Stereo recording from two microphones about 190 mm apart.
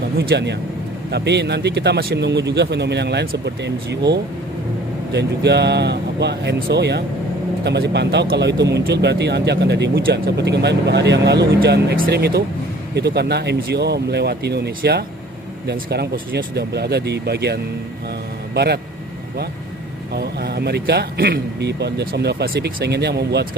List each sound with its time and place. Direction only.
0.2 s speech: 60° right (ahead or behind)
20.1 s speech: 60° right (ahead or behind)